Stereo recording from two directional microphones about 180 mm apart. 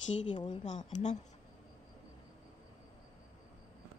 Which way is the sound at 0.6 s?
40° left (ahead or behind).